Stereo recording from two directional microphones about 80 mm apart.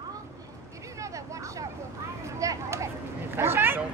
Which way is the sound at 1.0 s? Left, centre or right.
Right.